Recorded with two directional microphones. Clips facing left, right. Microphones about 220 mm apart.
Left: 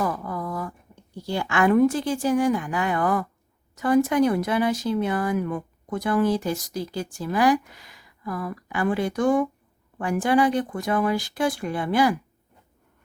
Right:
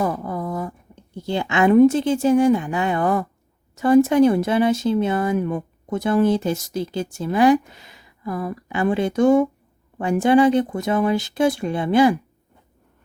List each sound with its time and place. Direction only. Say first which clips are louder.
0.0 s speech: right 4 dB; 25° right (ahead or behind)